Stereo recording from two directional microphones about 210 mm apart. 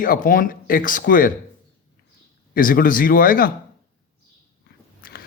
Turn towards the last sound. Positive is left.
turn(degrees=45)  # may be behind; listen again after turning